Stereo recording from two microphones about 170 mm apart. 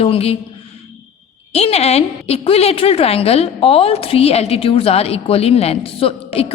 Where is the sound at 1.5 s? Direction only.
40° left (ahead or behind).